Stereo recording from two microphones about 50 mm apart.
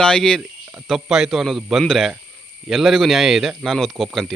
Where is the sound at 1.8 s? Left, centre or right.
Centre.